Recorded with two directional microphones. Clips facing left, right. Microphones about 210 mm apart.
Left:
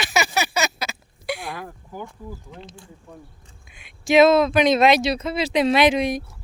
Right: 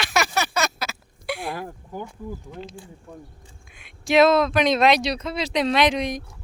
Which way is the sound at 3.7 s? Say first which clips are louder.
Left 2 dB; centre (ahead or behind).